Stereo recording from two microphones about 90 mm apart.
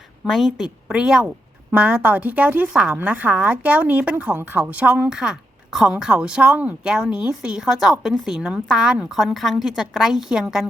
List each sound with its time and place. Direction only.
0.3 s a woman's voice: centre (ahead or behind)